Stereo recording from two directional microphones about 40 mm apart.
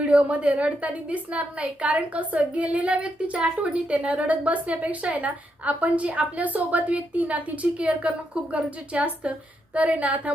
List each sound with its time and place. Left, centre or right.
0.0 s a woman's voice: right